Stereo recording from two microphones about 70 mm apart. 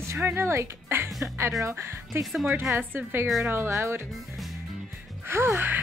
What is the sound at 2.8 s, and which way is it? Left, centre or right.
Speech, right.